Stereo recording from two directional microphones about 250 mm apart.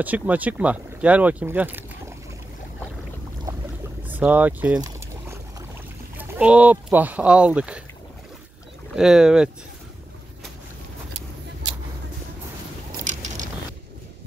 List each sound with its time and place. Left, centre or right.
0.0 s speech: centre
3.5 s boat: centre
6.1 s speech: centre
8.9 s speech: centre
13.0 s biting: right